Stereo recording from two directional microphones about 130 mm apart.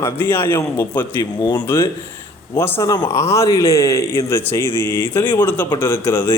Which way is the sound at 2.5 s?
20° left (ahead or behind).